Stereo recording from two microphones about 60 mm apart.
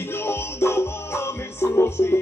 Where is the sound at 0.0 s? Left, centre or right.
Left.